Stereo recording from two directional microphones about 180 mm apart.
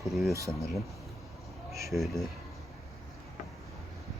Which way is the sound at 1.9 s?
Centre (ahead or behind).